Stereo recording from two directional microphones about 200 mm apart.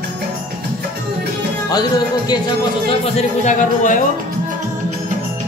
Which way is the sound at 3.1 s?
35° left (ahead or behind).